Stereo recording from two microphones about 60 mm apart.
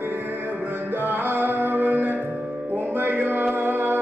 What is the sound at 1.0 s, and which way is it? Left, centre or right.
Music, right.